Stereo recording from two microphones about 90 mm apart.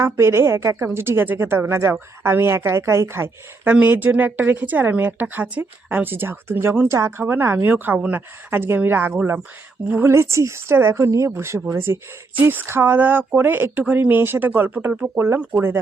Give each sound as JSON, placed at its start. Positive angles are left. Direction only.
{"t": 0.0, "sound": "a woman's voice", "side_deg": -30}